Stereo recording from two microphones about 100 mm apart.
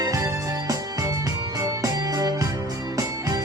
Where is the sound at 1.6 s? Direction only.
35° right (ahead or behind).